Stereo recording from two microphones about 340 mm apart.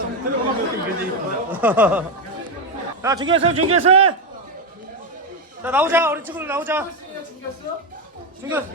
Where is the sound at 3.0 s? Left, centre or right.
Centre.